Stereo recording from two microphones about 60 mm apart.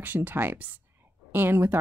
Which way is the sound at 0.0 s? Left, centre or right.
Right.